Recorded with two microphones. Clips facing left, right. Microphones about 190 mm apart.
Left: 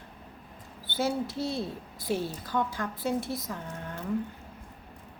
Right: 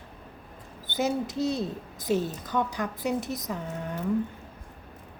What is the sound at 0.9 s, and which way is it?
A woman's voice, 20° right (ahead or behind).